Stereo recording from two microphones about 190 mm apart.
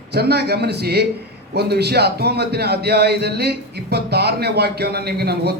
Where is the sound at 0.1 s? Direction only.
60° right (ahead or behind).